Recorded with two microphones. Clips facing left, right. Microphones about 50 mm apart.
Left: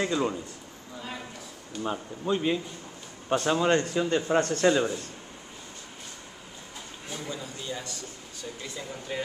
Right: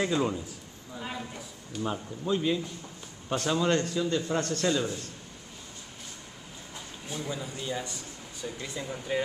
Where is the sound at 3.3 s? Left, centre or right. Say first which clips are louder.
Left 3 dB; centre.